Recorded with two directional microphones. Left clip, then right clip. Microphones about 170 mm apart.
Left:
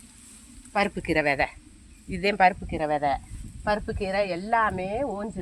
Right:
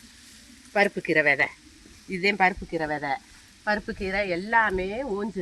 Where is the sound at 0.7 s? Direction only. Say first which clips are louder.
Right 3 dB; 55° left (ahead or behind).